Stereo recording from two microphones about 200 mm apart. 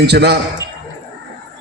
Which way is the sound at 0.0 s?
55° right (ahead or behind).